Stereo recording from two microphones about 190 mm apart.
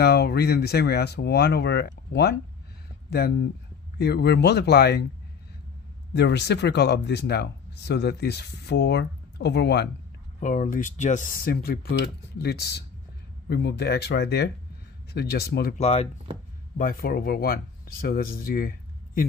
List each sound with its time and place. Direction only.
0.0 s speech: 60° left (ahead or behind)
3.1 s speech: 60° left (ahead or behind)
6.1 s speech: 65° left (ahead or behind)
10.4 s speech: 45° left (ahead or behind)
15.8 s speech: 30° left (ahead or behind)
16.7 s speech: 50° left (ahead or behind)